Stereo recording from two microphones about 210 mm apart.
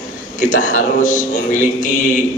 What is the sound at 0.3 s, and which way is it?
A man's voice, 40° left (ahead or behind).